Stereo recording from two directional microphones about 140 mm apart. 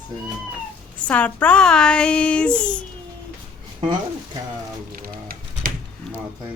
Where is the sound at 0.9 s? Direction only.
10° left (ahead or behind).